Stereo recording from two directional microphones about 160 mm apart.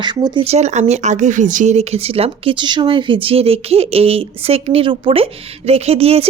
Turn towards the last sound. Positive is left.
turn(degrees=-40)  # may be behind; listen again after turning